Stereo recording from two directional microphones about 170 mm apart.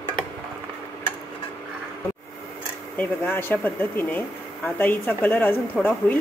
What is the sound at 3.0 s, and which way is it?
Speech, 10° left (ahead or behind).